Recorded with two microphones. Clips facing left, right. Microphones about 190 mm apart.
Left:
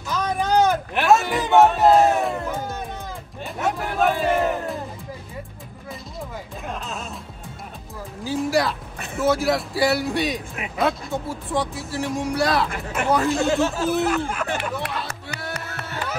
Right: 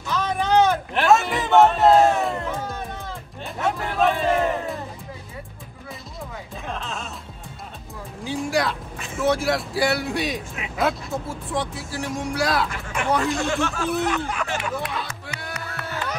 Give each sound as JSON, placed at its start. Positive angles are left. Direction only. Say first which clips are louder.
{"t": 0.1, "sound": "music", "louder": "even", "side_deg": 0}
{"t": 6.6, "sound": "music", "louder": "right 1 dB", "side_deg": 5}
{"t": 8.2, "sound": "speech", "louder": "left 2 dB", "side_deg": 0}
{"t": 13.5, "sound": "speech", "louder": "left 4 dB", "side_deg": 35}
{"t": 13.8, "sound": "a sound", "louder": "left 2 dB", "side_deg": 0}
{"t": 15.0, "sound": "music", "louder": "left 3 dB", "side_deg": 35}